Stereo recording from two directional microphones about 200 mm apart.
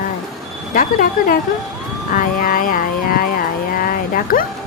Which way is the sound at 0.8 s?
45° left (ahead or behind).